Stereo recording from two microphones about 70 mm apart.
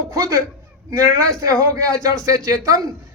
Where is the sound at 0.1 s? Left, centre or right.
Right.